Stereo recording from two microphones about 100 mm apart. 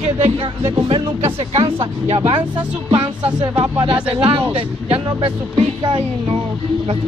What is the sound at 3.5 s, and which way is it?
Speech, 70° right (ahead or behind).